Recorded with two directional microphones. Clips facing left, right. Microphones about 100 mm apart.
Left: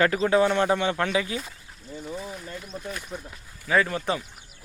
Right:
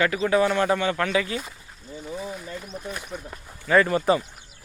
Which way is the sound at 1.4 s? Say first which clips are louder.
Right 1 dB; 10° right (ahead or behind).